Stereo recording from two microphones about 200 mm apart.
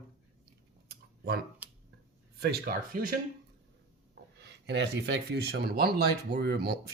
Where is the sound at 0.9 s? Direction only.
50° right (ahead or behind).